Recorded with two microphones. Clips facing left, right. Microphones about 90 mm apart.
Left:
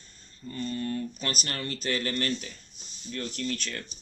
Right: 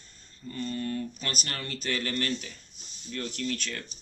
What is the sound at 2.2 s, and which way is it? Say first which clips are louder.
Speech: left 1 dB; 5° right (ahead or behind).